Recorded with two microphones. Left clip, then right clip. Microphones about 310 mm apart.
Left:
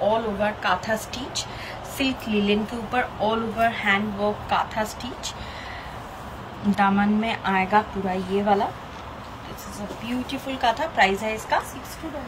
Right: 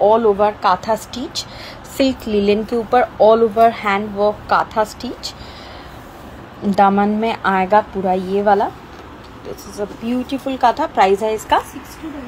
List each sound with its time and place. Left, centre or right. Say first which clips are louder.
0.1 s speech: right 10 dB; centre
6.7 s speech: right 8 dB; centre
10.0 s speech: right 6 dB; centre